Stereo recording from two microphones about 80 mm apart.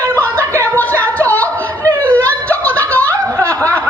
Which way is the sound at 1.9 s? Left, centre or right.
Left.